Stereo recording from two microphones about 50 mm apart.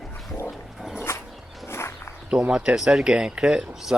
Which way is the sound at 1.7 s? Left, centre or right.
Left.